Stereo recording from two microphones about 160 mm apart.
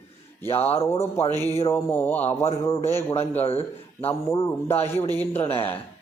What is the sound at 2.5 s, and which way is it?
Speech, 40° left (ahead or behind).